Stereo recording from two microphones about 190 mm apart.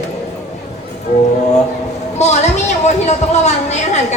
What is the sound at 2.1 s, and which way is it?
Speech, 35° left (ahead or behind).